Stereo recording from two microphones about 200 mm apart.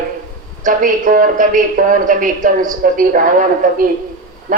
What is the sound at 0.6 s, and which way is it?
A woman's voice, 40° right (ahead or behind).